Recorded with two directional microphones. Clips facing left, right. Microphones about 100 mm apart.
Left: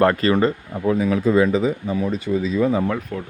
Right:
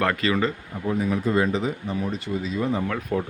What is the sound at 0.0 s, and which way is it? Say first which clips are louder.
Speech: left 6 dB; 35° left (ahead or behind).